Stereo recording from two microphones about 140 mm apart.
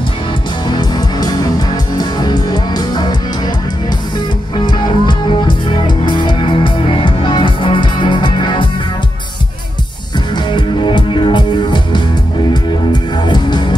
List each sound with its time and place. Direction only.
0.7 s music: 30° left (ahead or behind)
4.6 s music: 35° left (ahead or behind)
10.3 s music: 35° left (ahead or behind)